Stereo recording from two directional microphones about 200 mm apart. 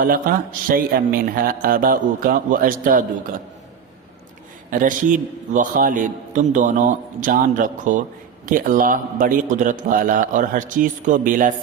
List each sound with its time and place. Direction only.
0.0 s speech: 45° right (ahead or behind)
4.7 s a man's voice: 40° right (ahead or behind)